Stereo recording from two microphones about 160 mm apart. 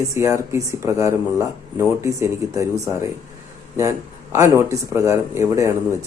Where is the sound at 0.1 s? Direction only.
20° right (ahead or behind).